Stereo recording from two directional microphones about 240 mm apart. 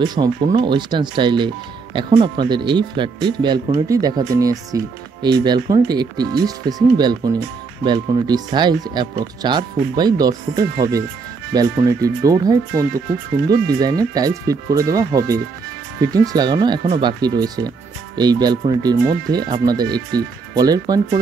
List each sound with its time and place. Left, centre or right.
0.0 s speech: centre